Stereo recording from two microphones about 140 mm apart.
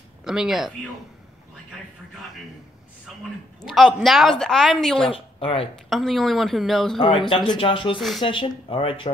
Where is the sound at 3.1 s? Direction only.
Centre (ahead or behind).